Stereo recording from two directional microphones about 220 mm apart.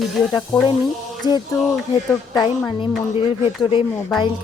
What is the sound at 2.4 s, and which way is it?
A woman's voice, 20° left (ahead or behind).